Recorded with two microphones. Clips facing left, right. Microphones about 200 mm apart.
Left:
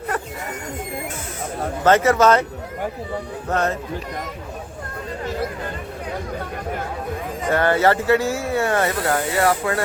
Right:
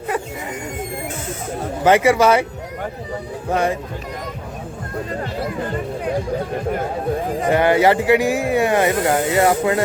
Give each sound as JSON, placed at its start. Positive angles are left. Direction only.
{"t": 1.8, "sound": "speech", "side_deg": -15}
{"t": 3.5, "sound": "speech", "side_deg": -10}
{"t": 7.4, "sound": "speech", "side_deg": -15}